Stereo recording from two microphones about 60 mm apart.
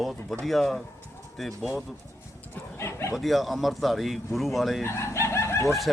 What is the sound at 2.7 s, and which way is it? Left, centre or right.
Bow-wow, left.